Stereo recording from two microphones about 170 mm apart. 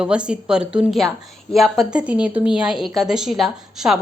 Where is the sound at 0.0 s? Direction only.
5° right (ahead or behind).